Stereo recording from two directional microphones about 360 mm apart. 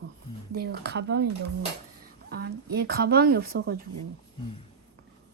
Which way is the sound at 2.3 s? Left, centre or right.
Right.